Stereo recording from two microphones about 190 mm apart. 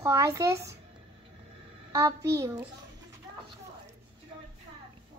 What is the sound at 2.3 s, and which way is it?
Child singing, 15° right (ahead or behind).